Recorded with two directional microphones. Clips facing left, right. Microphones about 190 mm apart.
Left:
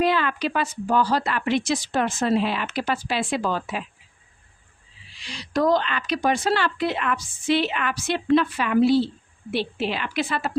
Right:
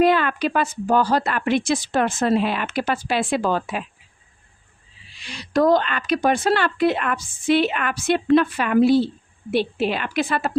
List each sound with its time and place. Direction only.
0.0 s speech: 50° right (ahead or behind)
5.2 s speech: 55° right (ahead or behind)